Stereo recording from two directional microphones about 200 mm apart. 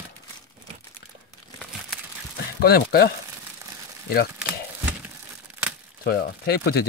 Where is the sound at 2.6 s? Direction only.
50° left (ahead or behind).